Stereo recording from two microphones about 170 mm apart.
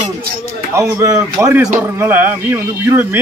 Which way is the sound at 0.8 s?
20° right (ahead or behind).